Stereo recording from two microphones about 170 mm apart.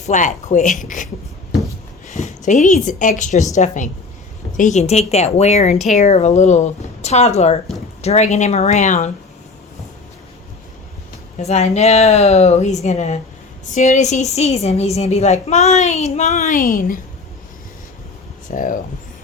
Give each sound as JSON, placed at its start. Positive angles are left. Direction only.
{"t": 0.0, "sound": "a woman's voice", "side_deg": 45}
{"t": 2.0, "sound": "a woman's voice", "side_deg": 45}
{"t": 11.3, "sound": "a woman's voice", "side_deg": 40}
{"t": 18.5, "sound": "a woman's voice", "side_deg": 50}